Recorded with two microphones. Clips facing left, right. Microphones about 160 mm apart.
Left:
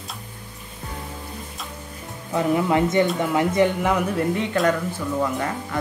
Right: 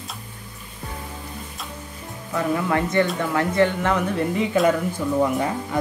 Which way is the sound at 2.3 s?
20° left (ahead or behind).